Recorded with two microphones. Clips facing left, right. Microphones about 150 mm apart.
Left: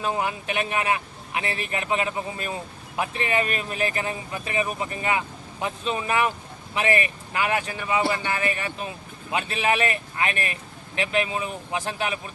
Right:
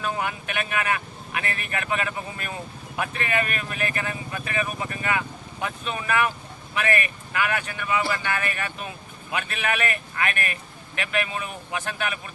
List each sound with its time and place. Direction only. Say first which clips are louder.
0.0 s speech: left 2 dB; 25° left (ahead or behind)